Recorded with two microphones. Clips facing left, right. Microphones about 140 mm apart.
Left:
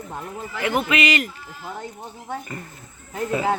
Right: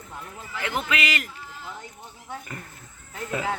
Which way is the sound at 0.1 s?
40° left (ahead or behind).